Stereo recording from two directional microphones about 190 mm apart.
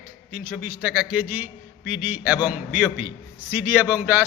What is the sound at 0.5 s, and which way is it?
A man's voice, 5° right (ahead or behind).